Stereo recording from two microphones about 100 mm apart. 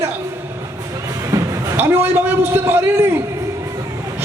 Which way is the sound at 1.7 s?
20° right (ahead or behind).